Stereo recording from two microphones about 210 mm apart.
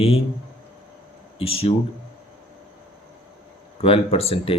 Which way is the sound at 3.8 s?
25° left (ahead or behind).